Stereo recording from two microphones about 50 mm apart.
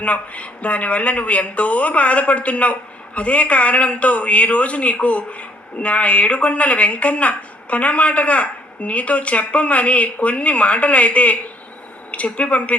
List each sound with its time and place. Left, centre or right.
0.0 s speech: left